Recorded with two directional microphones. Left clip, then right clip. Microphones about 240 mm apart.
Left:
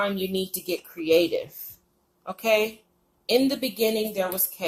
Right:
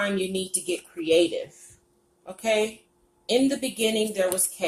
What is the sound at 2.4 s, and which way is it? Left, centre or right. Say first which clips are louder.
A woman's voice: left 2 dB; left.